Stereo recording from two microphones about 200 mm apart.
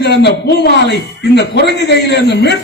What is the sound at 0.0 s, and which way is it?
A man's voice, 55° left (ahead or behind).